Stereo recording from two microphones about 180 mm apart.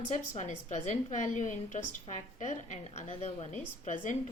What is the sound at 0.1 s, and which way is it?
A woman's voice, 40° left (ahead or behind).